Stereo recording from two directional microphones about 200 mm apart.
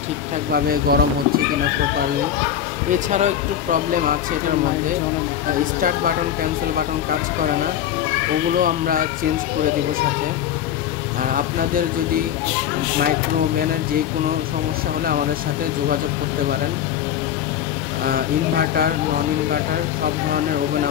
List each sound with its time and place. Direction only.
0.5 s speech: 50° right (ahead or behind)
5.8 s speech: 45° right (ahead or behind)
8.6 s speech: 45° right (ahead or behind)
18.0 s speech: 45° right (ahead or behind)